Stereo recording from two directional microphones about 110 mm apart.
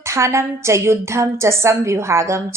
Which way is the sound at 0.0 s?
25° right (ahead or behind).